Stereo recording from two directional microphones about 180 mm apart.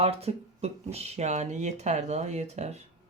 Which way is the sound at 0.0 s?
35° right (ahead or behind).